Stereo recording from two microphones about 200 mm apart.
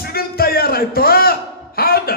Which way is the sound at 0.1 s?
50° left (ahead or behind).